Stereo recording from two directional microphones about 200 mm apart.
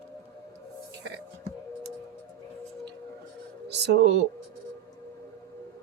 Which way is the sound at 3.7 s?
55° right (ahead or behind).